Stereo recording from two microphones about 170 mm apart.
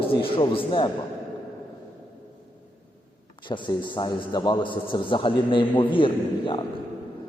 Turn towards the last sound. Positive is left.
turn(degrees=30)  # may be behind; listen again after turning